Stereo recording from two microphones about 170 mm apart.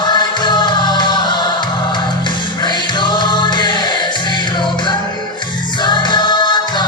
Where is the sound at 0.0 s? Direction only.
25° left (ahead or behind).